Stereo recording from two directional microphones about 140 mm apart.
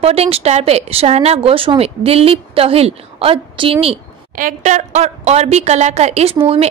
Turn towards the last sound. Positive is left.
turn(degrees=-45)  # may be behind; listen again after turning